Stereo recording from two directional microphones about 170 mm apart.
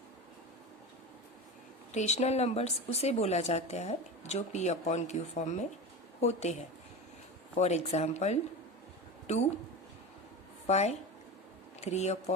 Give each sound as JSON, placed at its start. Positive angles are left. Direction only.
{"t": 1.9, "sound": "speech", "side_deg": 40}
{"t": 10.7, "sound": "speech", "side_deg": 40}